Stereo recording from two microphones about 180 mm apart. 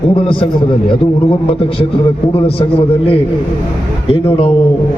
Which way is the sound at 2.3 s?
30° left (ahead or behind).